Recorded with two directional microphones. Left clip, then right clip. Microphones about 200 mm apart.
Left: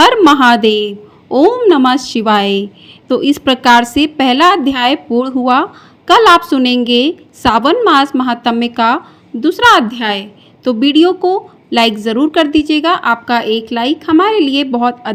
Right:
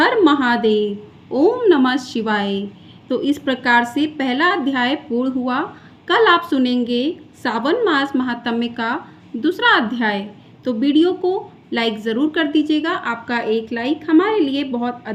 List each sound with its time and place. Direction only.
0.0 s a woman's voice: 35° left (ahead or behind)